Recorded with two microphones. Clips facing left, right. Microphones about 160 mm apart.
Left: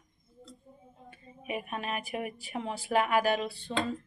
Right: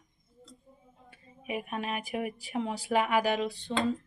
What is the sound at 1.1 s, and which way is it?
Speech, 10° right (ahead or behind).